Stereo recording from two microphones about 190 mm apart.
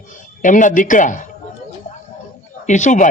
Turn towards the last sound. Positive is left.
turn(degrees=40)  # may be behind; listen again after turning